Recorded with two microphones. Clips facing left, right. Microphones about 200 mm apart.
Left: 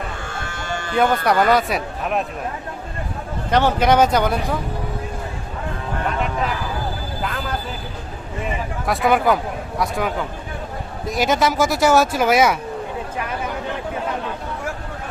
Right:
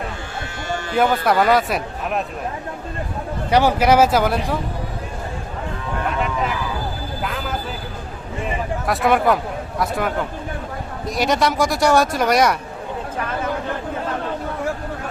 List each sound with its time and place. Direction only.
0.4 s electric shaver: 50° left (ahead or behind)
0.9 s speech: 5° right (ahead or behind)
3.5 s speech: 10° right (ahead or behind)
7.2 s a sound: centre (ahead or behind)
8.9 s speech: centre (ahead or behind)